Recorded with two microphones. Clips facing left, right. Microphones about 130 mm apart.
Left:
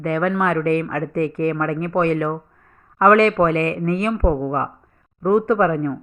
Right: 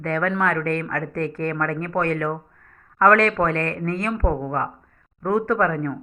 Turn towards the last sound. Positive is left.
turn(degrees=15)  # may be behind; listen again after turning